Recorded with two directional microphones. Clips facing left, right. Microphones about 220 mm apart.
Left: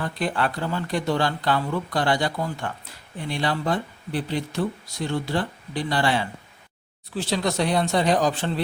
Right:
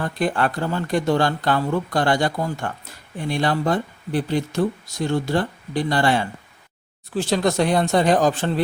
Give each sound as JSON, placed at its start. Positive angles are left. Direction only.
{"t": 0.0, "sound": "speech", "side_deg": -50}